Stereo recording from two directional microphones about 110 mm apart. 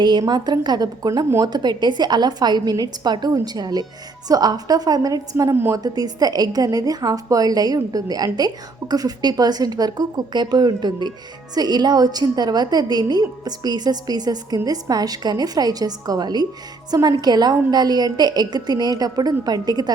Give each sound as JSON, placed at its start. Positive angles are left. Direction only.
{"t": 0.0, "sound": "a woman's voice", "side_deg": -40}
{"t": 5.5, "sound": "a woman's voice", "side_deg": -20}
{"t": 5.8, "sound": "a woman's voice", "side_deg": -35}